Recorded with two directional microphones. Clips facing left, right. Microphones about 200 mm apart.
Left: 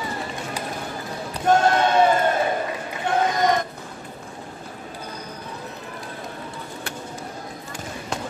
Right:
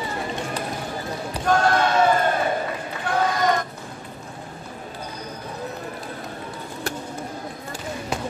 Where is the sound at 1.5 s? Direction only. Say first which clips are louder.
Left 2 dB; 25° left (ahead or behind).